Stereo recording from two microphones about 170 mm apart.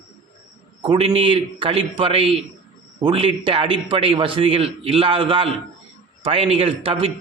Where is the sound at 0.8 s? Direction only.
30° right (ahead or behind).